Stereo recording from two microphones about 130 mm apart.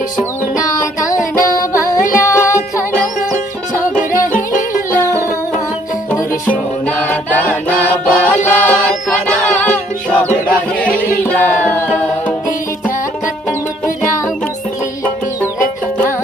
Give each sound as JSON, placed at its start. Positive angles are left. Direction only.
{"t": 1.4, "sound": "music", "side_deg": 25}
{"t": 4.1, "sound": "music", "side_deg": 90}
{"t": 6.5, "sound": "music", "side_deg": 10}